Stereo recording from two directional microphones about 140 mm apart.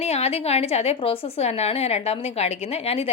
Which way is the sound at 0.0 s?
50° left (ahead or behind).